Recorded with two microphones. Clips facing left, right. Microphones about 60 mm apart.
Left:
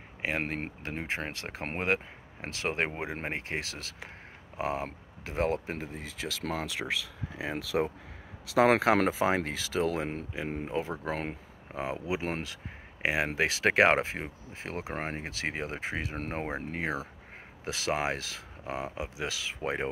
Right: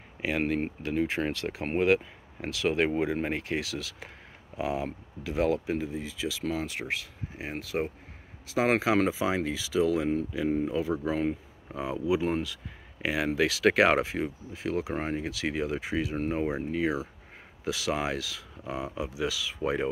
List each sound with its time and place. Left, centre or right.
0.2 s speech: left
8.5 s speech: left
9.2 s speech: left
10.7 s speech: left
12.3 s speech: left
13.0 s speech: left
16.2 s speech: left
17.6 s speech: left